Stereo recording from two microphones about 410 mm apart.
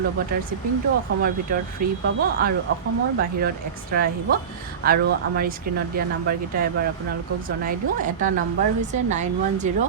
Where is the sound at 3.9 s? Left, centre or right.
Right.